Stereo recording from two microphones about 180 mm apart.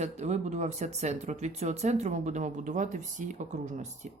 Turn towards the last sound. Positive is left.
turn(degrees=-40)  # may be behind; listen again after turning